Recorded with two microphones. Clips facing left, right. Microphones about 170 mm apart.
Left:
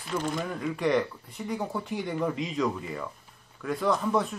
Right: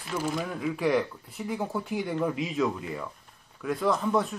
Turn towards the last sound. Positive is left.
turn(degrees=0)  # may be behind; listen again after turning